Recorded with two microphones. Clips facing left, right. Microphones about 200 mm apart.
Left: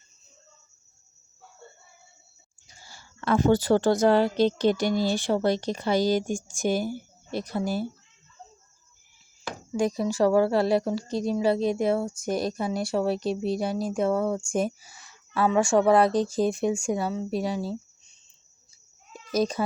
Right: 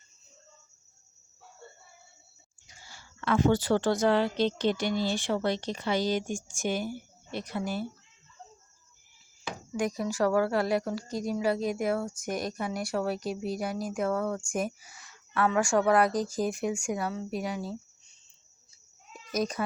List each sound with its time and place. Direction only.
2.6 s a woman's voice: 35° left (ahead or behind)
9.7 s a woman's voice: 30° left (ahead or behind)
19.1 s a sound: 30° left (ahead or behind)